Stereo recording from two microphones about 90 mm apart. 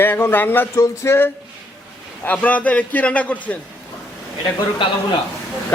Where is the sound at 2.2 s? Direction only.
15° left (ahead or behind).